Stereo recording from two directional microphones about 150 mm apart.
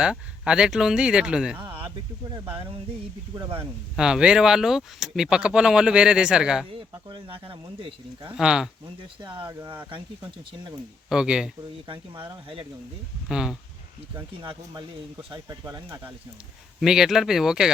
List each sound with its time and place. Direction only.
0.0 s speech: 5° right (ahead or behind)
1.6 s a sound: 35° right (ahead or behind)
2.3 s speech: 30° right (ahead or behind)
3.9 s speech: 5° right (ahead or behind)
6.7 s speech: 35° right (ahead or behind)
8.4 s speech: 5° right (ahead or behind)
9.2 s speech: 30° right (ahead or behind)
11.1 s speech: 5° right (ahead or behind)
11.9 s speech: 35° right (ahead or behind)
13.2 s speech: 5° right (ahead or behind)
15.3 s speech: 25° right (ahead or behind)
16.8 s speech: 5° right (ahead or behind)